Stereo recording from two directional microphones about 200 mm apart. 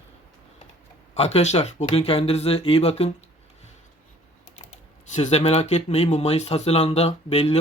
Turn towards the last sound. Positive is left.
turn(degrees=30)  # may be behind; listen again after turning